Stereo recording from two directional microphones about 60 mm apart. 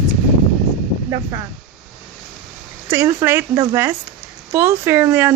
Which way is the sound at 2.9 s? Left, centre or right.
Right.